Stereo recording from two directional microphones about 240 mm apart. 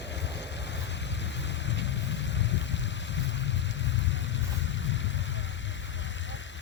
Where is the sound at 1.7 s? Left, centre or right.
Left.